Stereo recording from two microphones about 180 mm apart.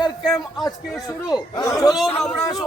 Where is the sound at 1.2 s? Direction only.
20° left (ahead or behind).